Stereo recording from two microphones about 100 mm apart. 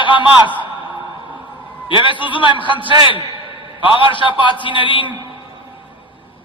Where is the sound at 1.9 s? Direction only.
55° left (ahead or behind).